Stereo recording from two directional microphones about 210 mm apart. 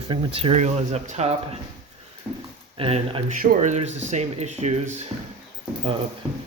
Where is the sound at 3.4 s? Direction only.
40° right (ahead or behind).